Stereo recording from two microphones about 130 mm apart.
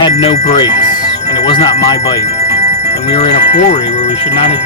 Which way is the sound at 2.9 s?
55° left (ahead or behind).